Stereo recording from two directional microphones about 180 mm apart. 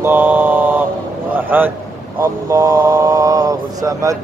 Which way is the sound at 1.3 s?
10° right (ahead or behind).